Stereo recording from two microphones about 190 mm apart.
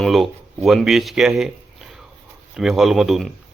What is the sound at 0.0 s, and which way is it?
Speech, centre (ahead or behind).